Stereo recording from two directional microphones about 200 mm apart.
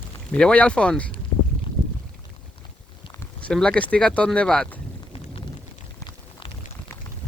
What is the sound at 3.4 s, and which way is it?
Speech, 5° left (ahead or behind).